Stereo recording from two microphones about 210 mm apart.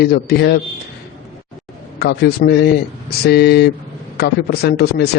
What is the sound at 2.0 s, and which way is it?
Speech, 50° left (ahead or behind).